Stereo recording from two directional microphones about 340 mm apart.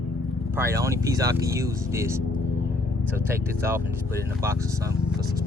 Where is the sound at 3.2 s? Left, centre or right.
Centre.